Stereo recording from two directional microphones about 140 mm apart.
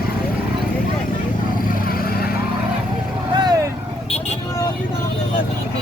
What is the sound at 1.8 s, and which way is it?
Vehicle, 90° left.